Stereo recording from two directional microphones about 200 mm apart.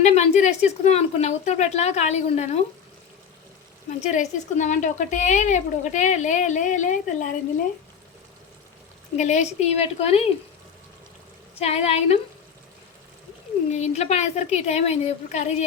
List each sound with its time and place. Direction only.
0.0 s speech: 35° left (ahead or behind)
4.0 s speech: 35° left (ahead or behind)
9.1 s speech: 35° left (ahead or behind)
11.6 s speech: 30° left (ahead or behind)
13.7 s speech: 35° left (ahead or behind)